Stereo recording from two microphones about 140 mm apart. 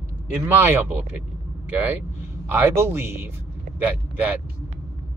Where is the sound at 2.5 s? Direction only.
15° right (ahead or behind).